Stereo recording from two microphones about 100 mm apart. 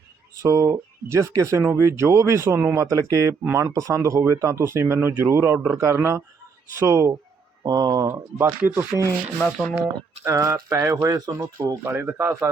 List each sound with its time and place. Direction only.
0.4 s speech: 35° right (ahead or behind)
7.6 s speech: 40° right (ahead or behind)
8.6 s speech: 25° right (ahead or behind)
9.6 s speech: centre (ahead or behind)
10.2 s speech: 30° right (ahead or behind)